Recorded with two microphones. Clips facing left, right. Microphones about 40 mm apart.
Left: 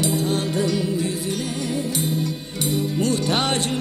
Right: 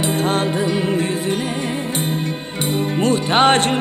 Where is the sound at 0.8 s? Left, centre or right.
Right.